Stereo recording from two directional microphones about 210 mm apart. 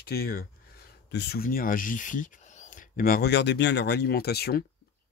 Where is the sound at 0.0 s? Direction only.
45° left (ahead or behind).